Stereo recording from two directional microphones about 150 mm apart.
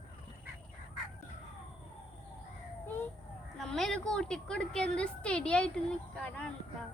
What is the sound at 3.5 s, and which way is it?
Speech, centre (ahead or behind).